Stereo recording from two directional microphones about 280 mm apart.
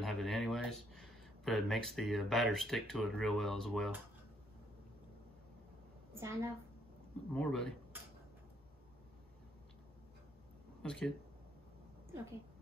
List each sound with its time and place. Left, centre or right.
0.0 s speech: centre
6.1 s a woman's voice: centre
7.3 s speech: centre
10.8 s speech: centre